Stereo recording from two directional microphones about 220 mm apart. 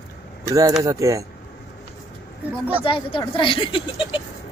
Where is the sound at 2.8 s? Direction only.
25° left (ahead or behind).